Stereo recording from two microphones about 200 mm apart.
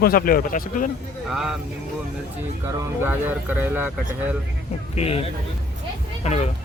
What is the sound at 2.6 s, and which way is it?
Speech, 15° right (ahead or behind).